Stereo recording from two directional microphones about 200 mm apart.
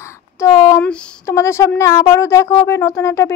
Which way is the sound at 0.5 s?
25° left (ahead or behind).